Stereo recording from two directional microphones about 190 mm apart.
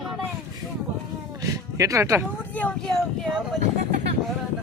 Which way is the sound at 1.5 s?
15° right (ahead or behind).